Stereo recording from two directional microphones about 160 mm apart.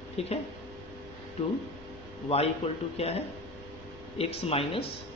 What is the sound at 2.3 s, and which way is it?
Speech, 40° left (ahead or behind).